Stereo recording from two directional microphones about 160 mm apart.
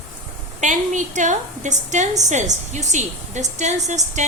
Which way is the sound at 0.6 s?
50° right (ahead or behind).